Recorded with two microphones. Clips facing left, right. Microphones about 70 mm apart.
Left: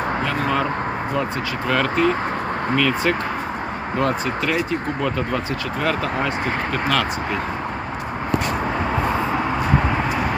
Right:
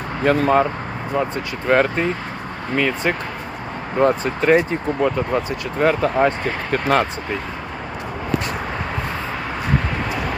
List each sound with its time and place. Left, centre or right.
0.3 s speech: right
1.6 s speech: right
4.2 s speech: right
5.0 s speech: right
6.4 s speech: right